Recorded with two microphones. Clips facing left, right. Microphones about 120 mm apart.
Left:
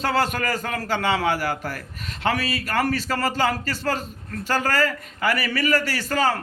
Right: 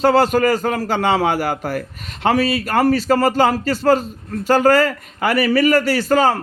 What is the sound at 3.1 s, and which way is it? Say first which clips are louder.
Speech: right 8 dB; 45° right (ahead or behind).